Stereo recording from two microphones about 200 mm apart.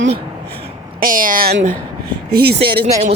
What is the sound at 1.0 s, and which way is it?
A woman's voice, 45° right (ahead or behind).